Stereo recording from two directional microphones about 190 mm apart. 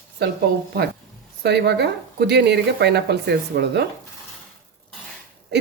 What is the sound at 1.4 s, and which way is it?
Cutlery, 60° right (ahead or behind).